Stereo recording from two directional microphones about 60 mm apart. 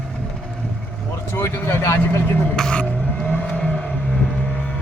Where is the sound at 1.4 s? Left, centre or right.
Left.